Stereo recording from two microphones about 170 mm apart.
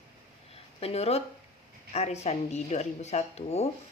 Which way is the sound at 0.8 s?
35° left (ahead or behind).